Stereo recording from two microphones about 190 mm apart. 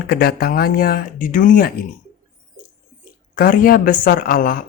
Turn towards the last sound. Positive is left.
turn(degrees=50)  # may be behind; listen again after turning